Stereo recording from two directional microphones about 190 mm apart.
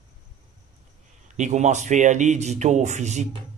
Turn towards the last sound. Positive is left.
turn(degrees=-40)  # may be behind; listen again after turning